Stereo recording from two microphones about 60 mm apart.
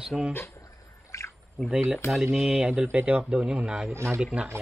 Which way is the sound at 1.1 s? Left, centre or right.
Left.